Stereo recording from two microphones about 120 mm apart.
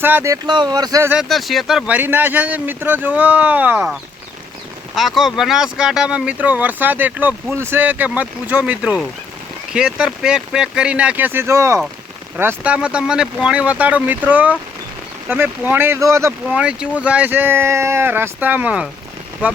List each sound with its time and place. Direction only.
0.0 s speech: 20° right (ahead or behind)
0.4 s speech: 35° right (ahead or behind)
1.2 s speech: centre (ahead or behind)
2.0 s speech: 15° right (ahead or behind)
4.9 s speech: centre (ahead or behind); by 16.3 s 25° right (ahead or behind)
16.5 s speech: 10° right (ahead or behind)